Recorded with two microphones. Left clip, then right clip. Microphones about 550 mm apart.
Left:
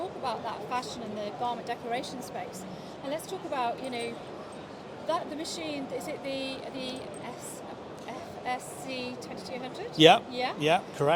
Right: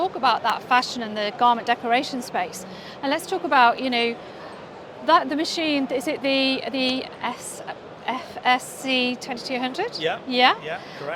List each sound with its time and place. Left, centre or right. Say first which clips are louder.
0.2 s speech: right 15 dB; right